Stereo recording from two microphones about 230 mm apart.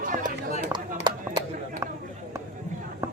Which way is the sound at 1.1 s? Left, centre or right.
Centre.